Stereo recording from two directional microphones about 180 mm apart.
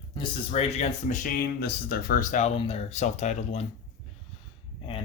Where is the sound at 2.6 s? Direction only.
35° left (ahead or behind).